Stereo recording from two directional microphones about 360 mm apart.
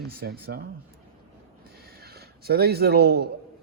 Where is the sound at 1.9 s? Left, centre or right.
Right.